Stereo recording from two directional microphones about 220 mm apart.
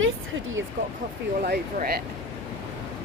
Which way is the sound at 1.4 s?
45° right (ahead or behind).